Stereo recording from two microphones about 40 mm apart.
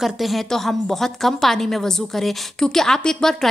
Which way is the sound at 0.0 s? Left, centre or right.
Centre.